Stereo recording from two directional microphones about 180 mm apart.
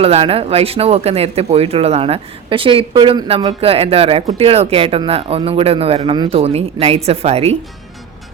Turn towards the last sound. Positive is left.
turn(degrees=-35)  # may be behind; listen again after turning